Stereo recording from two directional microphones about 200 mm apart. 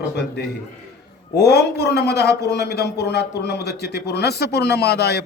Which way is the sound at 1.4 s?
55° left (ahead or behind).